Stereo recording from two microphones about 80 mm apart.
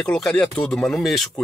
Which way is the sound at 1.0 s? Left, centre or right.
Centre.